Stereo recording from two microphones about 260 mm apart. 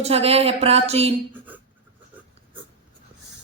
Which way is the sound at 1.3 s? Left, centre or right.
Centre.